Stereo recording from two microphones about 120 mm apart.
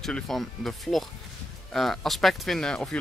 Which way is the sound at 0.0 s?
Centre (ahead or behind).